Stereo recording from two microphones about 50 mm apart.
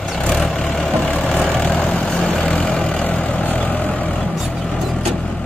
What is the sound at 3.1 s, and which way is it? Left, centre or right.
Vehicle, left.